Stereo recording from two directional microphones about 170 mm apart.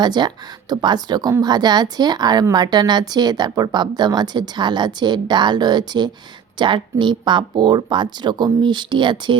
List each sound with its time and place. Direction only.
0.0 s speech: 25° right (ahead or behind)